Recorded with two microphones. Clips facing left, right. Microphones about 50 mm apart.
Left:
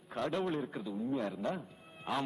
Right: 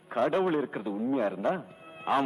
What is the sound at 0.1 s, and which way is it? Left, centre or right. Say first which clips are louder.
A man's voice: right 8 dB; right.